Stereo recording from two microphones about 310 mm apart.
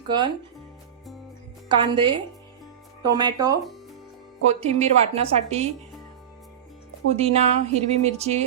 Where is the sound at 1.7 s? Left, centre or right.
Centre.